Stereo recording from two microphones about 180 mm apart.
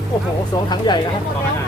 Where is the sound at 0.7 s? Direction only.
25° left (ahead or behind).